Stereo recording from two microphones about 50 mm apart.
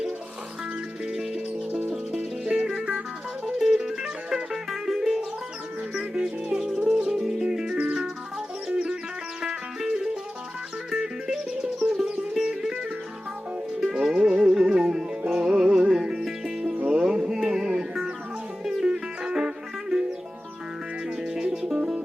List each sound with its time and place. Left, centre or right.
1.1 s music: centre
13.7 s music: centre
21.2 s music: centre